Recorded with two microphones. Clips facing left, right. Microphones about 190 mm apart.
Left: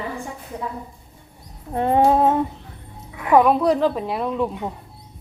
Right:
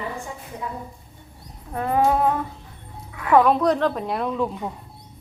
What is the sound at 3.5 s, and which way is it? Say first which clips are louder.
Speech: left 2 dB; 5° left (ahead or behind).